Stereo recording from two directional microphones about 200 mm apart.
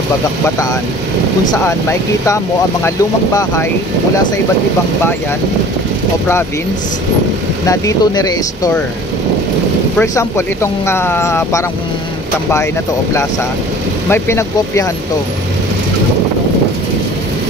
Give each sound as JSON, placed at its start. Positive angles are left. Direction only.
{"t": 1.6, "sound": "speech", "side_deg": 15}
{"t": 7.6, "sound": "speech", "side_deg": 15}
{"t": 9.9, "sound": "speech", "side_deg": 10}
{"t": 14.0, "sound": "speech", "side_deg": 10}